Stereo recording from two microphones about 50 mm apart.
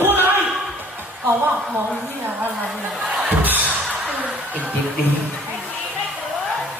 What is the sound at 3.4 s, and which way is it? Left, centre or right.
Music, right.